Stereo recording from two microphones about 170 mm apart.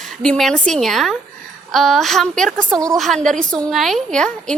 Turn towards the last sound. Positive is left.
turn(degrees=5)  # may be behind; listen again after turning